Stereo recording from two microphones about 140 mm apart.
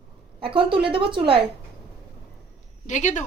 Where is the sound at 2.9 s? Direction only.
60° left (ahead or behind).